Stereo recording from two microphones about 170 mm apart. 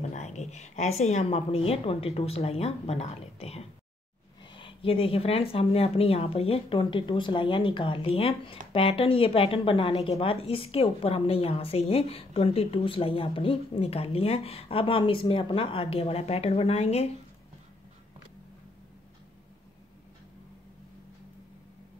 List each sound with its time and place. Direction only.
0.1 s speech: 40° left (ahead or behind)